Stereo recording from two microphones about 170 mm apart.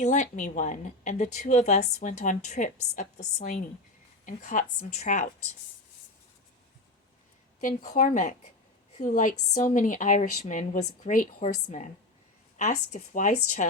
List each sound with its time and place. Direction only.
0.0 s a woman's voice: 45° left (ahead or behind)
7.6 s a woman's voice: 50° left (ahead or behind)